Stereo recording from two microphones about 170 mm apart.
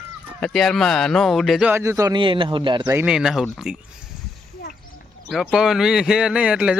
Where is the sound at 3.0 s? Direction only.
5° right (ahead or behind).